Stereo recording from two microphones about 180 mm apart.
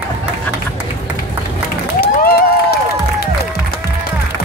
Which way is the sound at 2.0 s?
60° left (ahead or behind).